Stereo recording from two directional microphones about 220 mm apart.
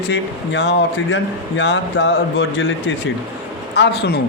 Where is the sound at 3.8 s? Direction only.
50° left (ahead or behind).